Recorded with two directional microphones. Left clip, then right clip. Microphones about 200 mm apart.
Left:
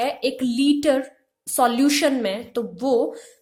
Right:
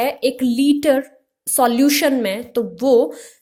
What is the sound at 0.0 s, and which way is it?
A woman's voice, 30° right (ahead or behind).